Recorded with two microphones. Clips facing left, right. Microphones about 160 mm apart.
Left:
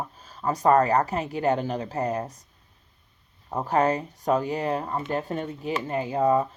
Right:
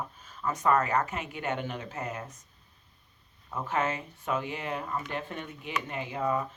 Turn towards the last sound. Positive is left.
turn(degrees=35)  # may be behind; listen again after turning